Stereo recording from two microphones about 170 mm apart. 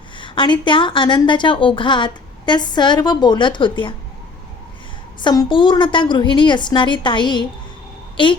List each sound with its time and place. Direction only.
0.2 s a woman's voice: 30° left (ahead or behind)
5.2 s a woman's voice: 25° left (ahead or behind)